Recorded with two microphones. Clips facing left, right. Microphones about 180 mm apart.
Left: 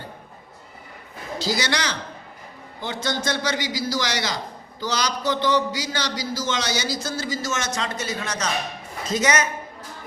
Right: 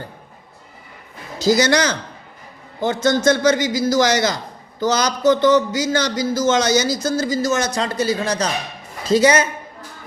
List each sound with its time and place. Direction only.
1.4 s a man's voice: 45° right (ahead or behind)